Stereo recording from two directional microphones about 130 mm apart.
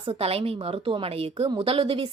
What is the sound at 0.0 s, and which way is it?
A woman's voice, 50° right (ahead or behind).